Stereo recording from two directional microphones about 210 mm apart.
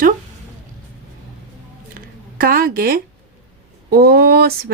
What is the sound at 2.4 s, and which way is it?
A woman's voice, 40° right (ahead or behind).